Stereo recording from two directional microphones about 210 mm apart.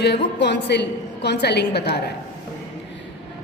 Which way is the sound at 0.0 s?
55° left (ahead or behind).